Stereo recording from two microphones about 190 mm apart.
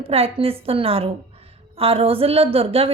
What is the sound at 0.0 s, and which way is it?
A woman's voice, 30° right (ahead or behind).